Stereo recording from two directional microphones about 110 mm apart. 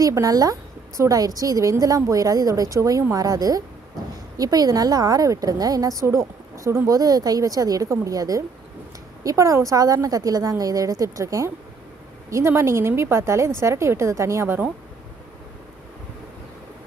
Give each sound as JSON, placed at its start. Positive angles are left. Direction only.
{"t": 0.0, "sound": "a woman's voice", "side_deg": -30}